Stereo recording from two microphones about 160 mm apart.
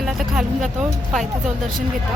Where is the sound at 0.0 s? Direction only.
5° right (ahead or behind).